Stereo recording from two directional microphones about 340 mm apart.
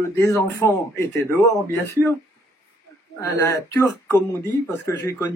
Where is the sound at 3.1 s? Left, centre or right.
Centre.